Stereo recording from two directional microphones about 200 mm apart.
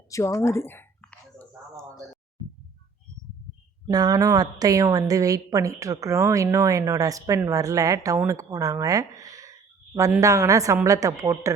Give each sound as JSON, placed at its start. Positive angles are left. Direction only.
{"t": 0.1, "sound": "speech", "side_deg": 15}
{"t": 3.8, "sound": "a woman's voice", "side_deg": -20}